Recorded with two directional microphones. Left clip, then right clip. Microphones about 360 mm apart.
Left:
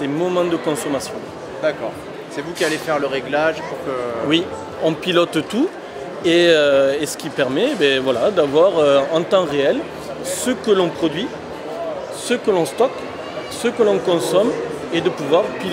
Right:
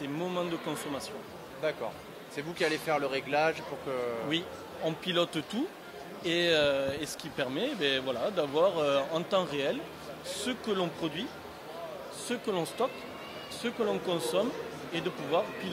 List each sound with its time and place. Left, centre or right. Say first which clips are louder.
0.0 s a sound: left 15 dB; right
2.3 s speech: left 10 dB; right
4.3 s speech: left 15 dB; right
12.3 s speech: left 15 dB; right